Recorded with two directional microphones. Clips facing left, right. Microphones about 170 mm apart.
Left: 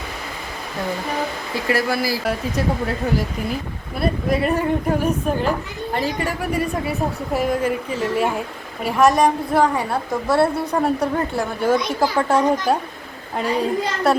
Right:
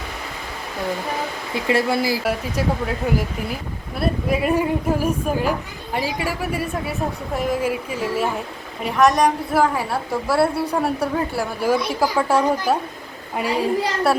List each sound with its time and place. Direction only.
1.5 s speech: 25° right (ahead or behind)
4.0 s a woman's voice: 10° right (ahead or behind)